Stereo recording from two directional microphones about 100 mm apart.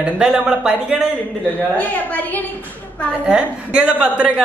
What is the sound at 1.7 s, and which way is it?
Speech, 15° left (ahead or behind).